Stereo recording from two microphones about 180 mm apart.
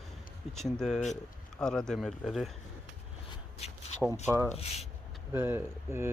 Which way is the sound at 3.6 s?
35° left (ahead or behind).